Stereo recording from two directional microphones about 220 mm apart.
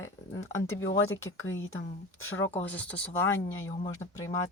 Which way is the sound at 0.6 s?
60° left (ahead or behind).